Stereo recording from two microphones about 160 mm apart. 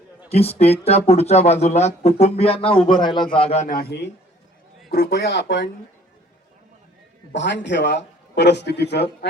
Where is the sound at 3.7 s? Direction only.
75° left (ahead or behind).